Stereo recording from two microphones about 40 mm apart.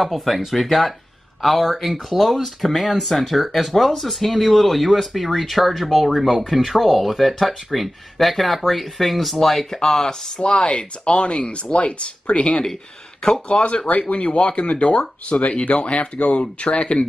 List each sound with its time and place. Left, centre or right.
0.0 s speech: centre
10.4 s speech: left
15.4 s speech: left